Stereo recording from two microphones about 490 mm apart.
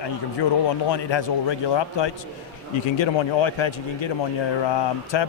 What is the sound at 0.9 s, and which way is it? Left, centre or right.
A man's voice, left.